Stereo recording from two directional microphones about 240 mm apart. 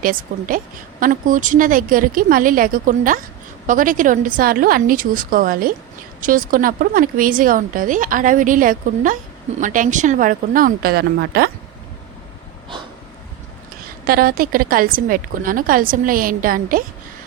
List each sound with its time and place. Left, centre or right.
0.0 s a woman's voice: right
14.1 s a woman's voice: right